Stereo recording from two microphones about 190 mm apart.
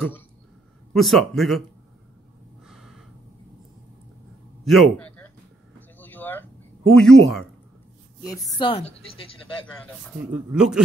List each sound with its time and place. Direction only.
0.9 s a man's voice: centre (ahead or behind)
4.6 s a man's voice: 5° left (ahead or behind)
5.8 s a sound: 10° left (ahead or behind)
6.9 s a man's voice: centre (ahead or behind)
8.5 s speech: 30° left (ahead or behind)
10.3 s a man's voice: 5° right (ahead or behind)